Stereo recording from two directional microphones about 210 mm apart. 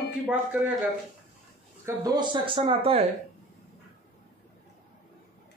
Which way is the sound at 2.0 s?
20° right (ahead or behind).